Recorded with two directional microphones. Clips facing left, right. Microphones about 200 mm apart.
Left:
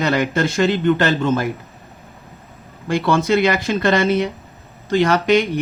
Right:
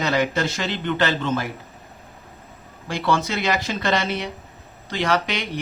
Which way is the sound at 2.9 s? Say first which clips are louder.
Left 6 dB; 55° left (ahead or behind).